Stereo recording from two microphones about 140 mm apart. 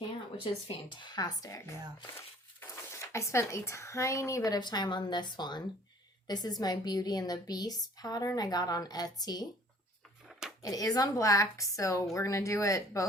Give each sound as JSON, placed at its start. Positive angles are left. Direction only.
{"t": 0.7, "sound": "a woman's voice", "side_deg": 35}
{"t": 10.6, "sound": "a woman's voice", "side_deg": 25}